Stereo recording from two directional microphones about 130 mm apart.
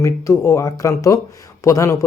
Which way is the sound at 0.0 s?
25° left (ahead or behind).